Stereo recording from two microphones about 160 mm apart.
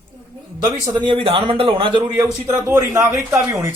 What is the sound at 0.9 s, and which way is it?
Speech, 30° right (ahead or behind).